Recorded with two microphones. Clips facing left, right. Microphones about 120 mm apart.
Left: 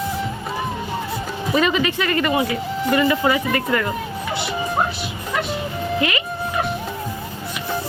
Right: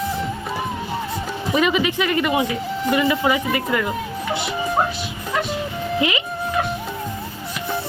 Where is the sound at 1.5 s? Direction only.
15° right (ahead or behind).